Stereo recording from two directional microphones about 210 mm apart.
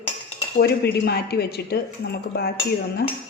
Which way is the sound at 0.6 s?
50° left (ahead or behind).